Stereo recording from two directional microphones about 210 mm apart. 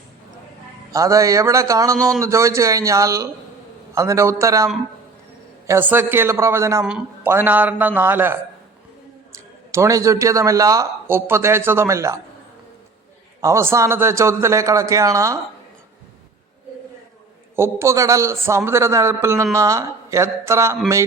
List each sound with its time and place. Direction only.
0.9 s a man's voice: 15° right (ahead or behind)
13.4 s a man's voice: 15° right (ahead or behind)
17.6 s a man's voice: 15° right (ahead or behind)